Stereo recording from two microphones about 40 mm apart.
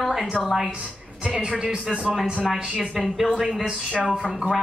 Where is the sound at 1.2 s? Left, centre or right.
Right.